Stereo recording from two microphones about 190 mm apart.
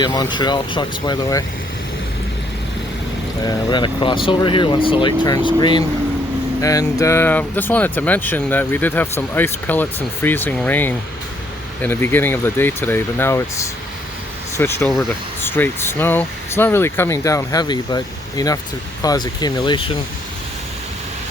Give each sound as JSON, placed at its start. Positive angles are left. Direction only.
{"t": 0.0, "sound": "speech", "side_deg": 25}
{"t": 3.4, "sound": "speech", "side_deg": 25}